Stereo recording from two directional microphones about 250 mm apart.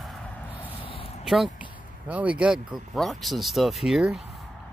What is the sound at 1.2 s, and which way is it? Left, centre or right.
Speech, centre.